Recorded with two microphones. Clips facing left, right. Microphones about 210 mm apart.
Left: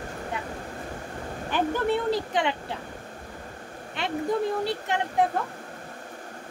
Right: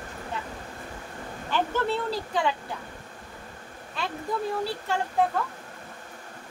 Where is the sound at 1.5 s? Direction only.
15° left (ahead or behind).